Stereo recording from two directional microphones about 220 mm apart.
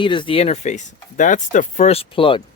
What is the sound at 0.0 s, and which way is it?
Speech, 20° left (ahead or behind).